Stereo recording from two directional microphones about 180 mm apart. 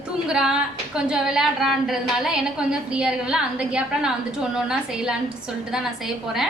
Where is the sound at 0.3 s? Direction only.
5° right (ahead or behind).